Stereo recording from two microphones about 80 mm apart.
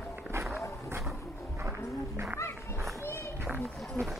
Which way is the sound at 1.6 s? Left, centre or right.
Right.